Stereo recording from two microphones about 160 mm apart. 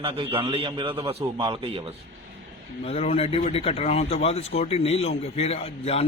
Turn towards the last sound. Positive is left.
turn(degrees=40)  # may be behind; listen again after turning